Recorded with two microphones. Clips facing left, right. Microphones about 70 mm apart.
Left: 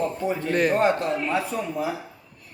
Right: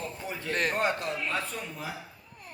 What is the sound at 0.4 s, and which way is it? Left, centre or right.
Speech, centre.